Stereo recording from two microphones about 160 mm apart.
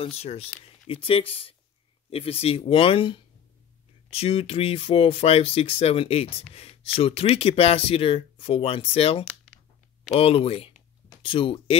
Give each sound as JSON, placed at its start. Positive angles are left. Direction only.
{"t": 0.0, "sound": "speech", "side_deg": 40}